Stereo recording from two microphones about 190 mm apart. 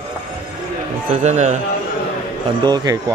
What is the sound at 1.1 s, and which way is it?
Speech, 35° right (ahead or behind).